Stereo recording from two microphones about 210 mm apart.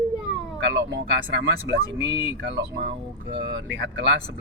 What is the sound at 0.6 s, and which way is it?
Speech, 55° right (ahead or behind).